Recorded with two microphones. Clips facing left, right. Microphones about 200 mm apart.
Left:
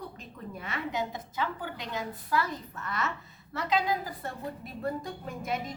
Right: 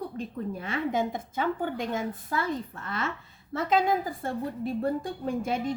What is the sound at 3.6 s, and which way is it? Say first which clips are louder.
Speech: right 4 dB; 50° right (ahead or behind).